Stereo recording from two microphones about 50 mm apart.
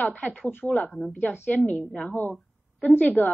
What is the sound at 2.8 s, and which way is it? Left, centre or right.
Speech, left.